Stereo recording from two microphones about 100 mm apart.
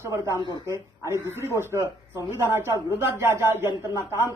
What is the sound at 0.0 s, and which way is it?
Speech, 30° right (ahead or behind).